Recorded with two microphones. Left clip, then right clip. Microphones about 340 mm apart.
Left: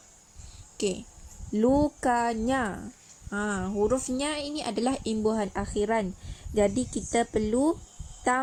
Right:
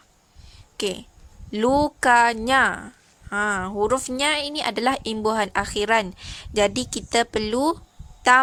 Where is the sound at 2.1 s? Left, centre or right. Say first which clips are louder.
Right 13 dB; right.